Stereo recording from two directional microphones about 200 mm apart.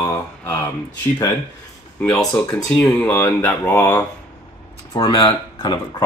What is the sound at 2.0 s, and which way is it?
Speech, 5° left (ahead or behind).